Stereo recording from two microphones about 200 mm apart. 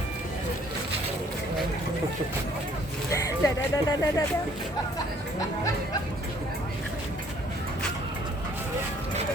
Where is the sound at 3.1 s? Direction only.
15° left (ahead or behind).